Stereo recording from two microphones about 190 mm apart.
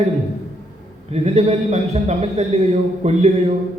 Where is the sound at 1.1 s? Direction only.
35° right (ahead or behind).